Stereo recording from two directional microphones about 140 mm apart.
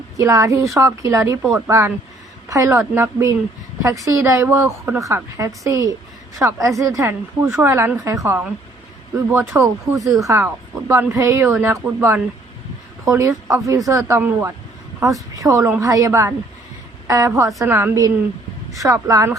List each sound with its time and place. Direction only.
0.2 s a woman's voice: 20° right (ahead or behind)
1.4 s speech: 10° right (ahead or behind)
2.5 s a woman's voice: 20° right (ahead or behind)